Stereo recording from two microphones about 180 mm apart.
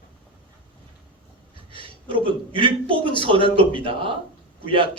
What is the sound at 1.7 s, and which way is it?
A man's voice, 30° right (ahead or behind).